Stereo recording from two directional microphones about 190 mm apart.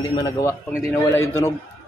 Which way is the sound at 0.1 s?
20° left (ahead or behind).